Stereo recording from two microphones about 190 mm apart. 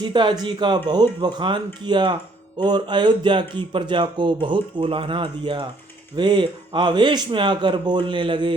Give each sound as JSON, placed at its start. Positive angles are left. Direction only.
{"t": 0.0, "sound": "speech", "side_deg": -25}